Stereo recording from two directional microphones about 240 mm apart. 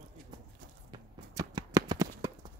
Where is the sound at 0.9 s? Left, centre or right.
Centre.